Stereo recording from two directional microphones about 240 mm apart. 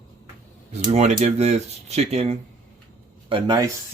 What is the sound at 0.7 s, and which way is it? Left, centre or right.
Speech, right.